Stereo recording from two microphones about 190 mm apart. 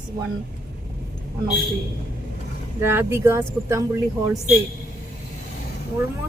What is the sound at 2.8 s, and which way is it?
Speech, 15° right (ahead or behind).